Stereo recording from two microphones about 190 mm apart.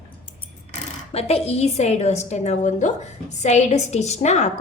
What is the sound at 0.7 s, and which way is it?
A woman's voice, 30° left (ahead or behind).